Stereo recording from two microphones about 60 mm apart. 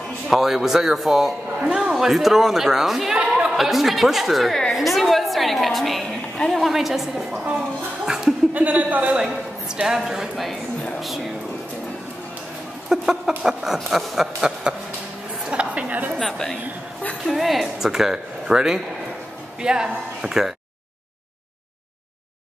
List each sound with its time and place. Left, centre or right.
0.3 s a man's voice: centre
3.2 s a sound: centre
3.5 s a man's voice: centre
8.0 s chuckle: centre
8.5 s a woman's voice: right
9.8 s speech: centre
12.9 s a sound: centre
13.4 s a man's voice: centre
15.4 s a sound: centre
16.2 s a woman's voice: centre